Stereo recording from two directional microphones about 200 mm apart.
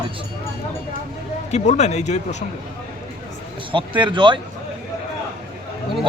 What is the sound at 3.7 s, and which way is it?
Speech, 25° right (ahead or behind).